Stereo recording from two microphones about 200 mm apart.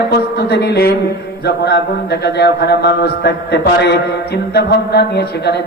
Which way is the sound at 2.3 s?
55° left (ahead or behind).